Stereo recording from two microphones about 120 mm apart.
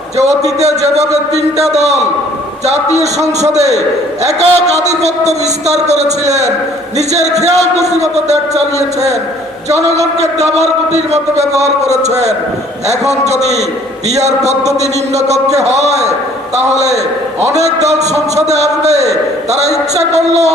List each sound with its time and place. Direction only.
0.2 s a man's voice: 65° right (ahead or behind)
10.2 s a man's voice: 65° right (ahead or behind)